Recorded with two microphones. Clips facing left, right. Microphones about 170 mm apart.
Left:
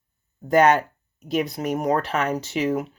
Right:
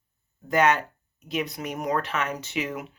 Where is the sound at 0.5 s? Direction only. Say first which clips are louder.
Left 5 dB; 45° left (ahead or behind).